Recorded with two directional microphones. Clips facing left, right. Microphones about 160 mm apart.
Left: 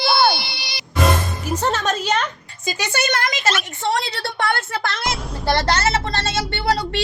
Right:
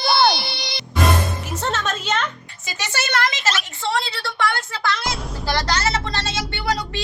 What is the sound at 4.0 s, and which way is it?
A woman's voice, 55° left (ahead or behind).